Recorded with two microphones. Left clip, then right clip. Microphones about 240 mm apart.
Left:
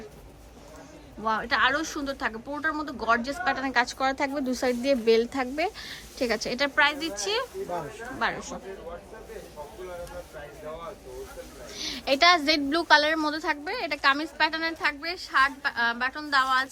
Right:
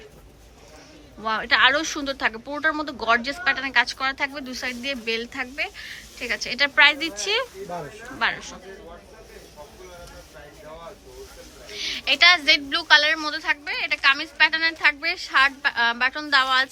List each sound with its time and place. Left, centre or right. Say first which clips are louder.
1.2 s speech: right 5 dB; centre
11.7 s speech: right 4 dB; centre